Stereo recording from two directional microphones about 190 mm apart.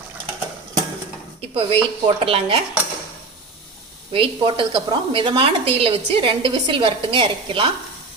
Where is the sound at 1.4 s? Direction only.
30° right (ahead or behind).